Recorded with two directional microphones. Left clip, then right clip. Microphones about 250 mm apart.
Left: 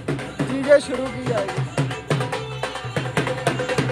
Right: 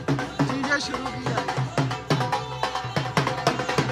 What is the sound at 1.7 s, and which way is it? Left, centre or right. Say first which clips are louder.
Music: left 1 dB; right.